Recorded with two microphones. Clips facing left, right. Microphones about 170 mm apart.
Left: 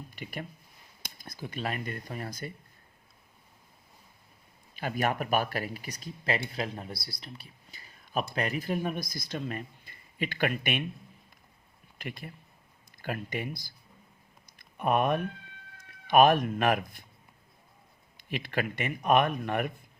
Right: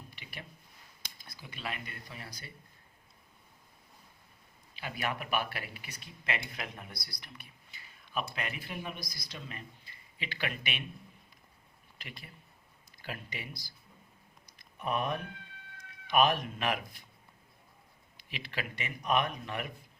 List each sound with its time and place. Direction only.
0.2 s speech: 45° left (ahead or behind)
4.7 s speech: 45° left (ahead or behind)
11.9 s speech: 50° left (ahead or behind)
14.4 s a sound: 55° left (ahead or behind)
16.0 s speech: 50° left (ahead or behind)
18.2 s a man's voice: 50° left (ahead or behind)